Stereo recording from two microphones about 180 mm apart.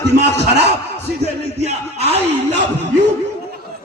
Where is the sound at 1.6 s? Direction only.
35° right (ahead or behind).